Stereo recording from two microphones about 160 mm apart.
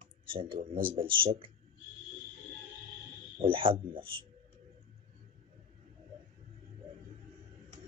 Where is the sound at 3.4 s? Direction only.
35° right (ahead or behind).